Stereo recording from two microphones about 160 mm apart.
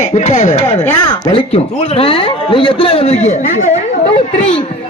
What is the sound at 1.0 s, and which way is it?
Speech, 25° left (ahead or behind).